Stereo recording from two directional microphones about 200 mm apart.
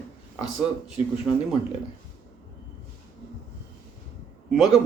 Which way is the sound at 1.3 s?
15° left (ahead or behind).